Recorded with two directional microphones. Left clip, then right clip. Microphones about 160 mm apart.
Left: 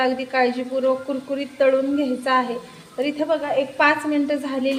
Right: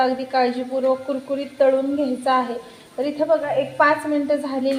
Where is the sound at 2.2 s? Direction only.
15° left (ahead or behind).